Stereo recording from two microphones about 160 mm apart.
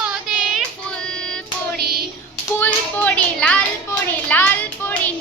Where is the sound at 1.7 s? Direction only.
75° right (ahead or behind).